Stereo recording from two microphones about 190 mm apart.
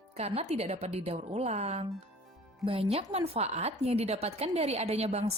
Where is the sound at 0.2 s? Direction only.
35° right (ahead or behind).